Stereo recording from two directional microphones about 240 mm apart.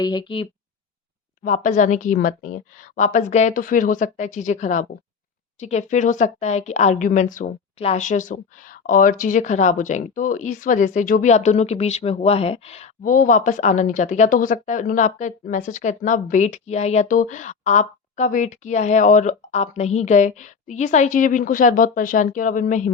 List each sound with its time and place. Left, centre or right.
0.0 s speech: centre
1.5 s speech: left